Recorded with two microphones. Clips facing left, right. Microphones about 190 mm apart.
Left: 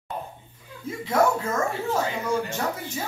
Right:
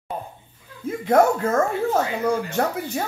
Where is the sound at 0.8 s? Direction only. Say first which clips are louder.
Right 5 dB; 55° right (ahead or behind).